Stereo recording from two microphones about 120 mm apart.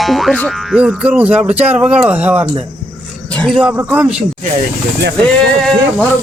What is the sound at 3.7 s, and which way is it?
Speech, 15° right (ahead or behind).